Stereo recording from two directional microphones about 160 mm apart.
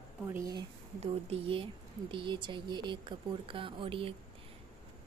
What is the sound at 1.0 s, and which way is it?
A woman's voice, 35° right (ahead or behind).